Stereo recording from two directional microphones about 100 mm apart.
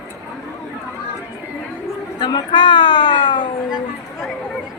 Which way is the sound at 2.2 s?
50° left (ahead or behind).